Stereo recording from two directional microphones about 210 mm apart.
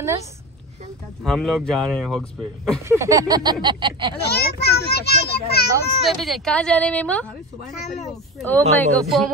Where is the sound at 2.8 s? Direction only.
15° right (ahead or behind).